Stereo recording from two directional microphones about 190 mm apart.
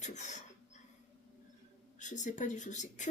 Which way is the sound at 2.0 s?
40° left (ahead or behind).